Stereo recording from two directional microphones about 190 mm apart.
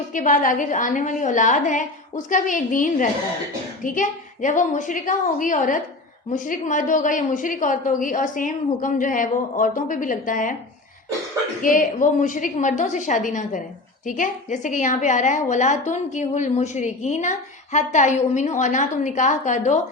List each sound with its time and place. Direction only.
0.1 s a woman's voice: 45° left (ahead or behind)
11.6 s a woman's voice: 45° left (ahead or behind)